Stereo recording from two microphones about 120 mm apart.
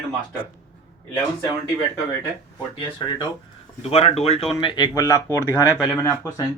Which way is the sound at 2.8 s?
45° left (ahead or behind).